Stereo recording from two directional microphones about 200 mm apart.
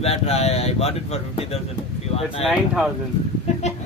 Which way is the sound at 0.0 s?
30° left (ahead or behind).